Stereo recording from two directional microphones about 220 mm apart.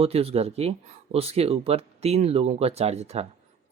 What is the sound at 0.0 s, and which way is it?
Speech, 25° right (ahead or behind).